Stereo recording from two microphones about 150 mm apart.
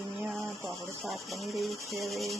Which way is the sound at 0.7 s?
Centre (ahead or behind).